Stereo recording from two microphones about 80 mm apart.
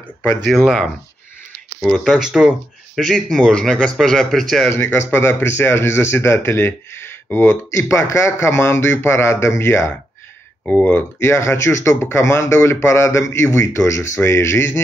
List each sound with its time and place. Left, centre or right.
0.5 s a man's voice: centre
3.0 s a man's voice: centre
4.6 s speech: left
10.7 s speech: left